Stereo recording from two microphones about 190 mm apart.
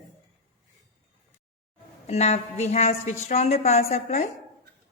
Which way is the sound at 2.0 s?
35° left (ahead or behind).